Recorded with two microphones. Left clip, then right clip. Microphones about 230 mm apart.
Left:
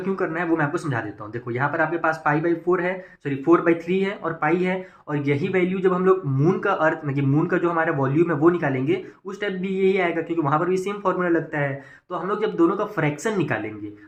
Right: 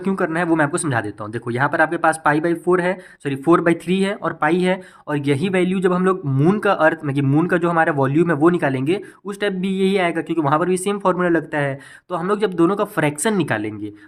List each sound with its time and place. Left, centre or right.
0.0 s speech: right